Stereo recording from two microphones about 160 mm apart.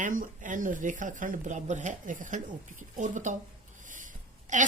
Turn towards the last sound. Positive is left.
turn(degrees=-50)  # may be behind; listen again after turning